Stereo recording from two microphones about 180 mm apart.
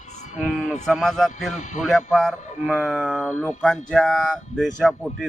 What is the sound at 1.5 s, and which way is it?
Speech, 40° left (ahead or behind).